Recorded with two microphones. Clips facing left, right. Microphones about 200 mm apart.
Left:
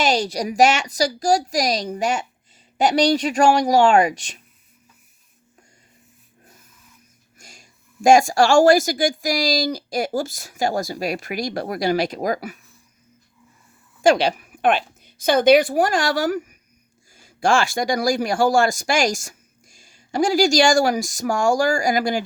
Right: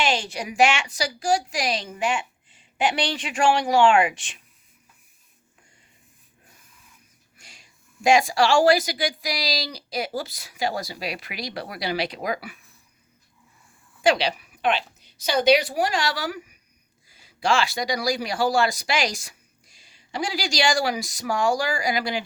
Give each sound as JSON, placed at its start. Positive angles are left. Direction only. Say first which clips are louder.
{"t": 0.0, "sound": "a woman's voice", "louder": "left 5 dB", "side_deg": 40}
{"t": 7.3, "sound": "speech", "louder": "left 5 dB", "side_deg": 45}
{"t": 14.0, "sound": "a woman's voice", "louder": "left 5 dB", "side_deg": 45}